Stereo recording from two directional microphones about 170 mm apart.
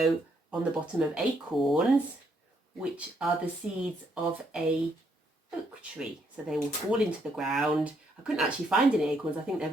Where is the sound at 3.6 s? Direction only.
5° right (ahead or behind).